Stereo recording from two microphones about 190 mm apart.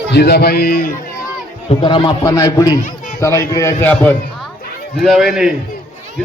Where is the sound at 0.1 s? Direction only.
60° left (ahead or behind).